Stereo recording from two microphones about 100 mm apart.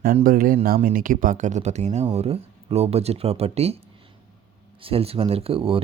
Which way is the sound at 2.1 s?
90° right.